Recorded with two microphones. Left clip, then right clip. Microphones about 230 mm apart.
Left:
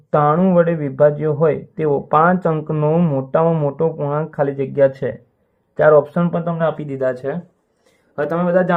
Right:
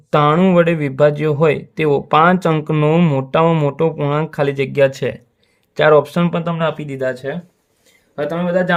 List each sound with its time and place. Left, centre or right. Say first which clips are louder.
0.1 s a man's voice: right 1 dB; right